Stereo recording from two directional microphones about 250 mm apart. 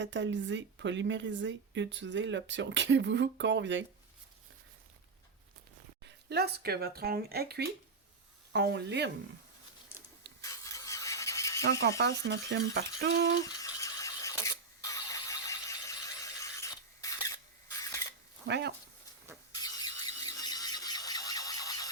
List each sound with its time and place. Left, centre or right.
0.0 s speech: right
6.2 s speech: right
10.4 s rub: centre
11.8 s speech: right
13.4 s a sound: centre
18.4 s speech: right
19.5 s a sound: centre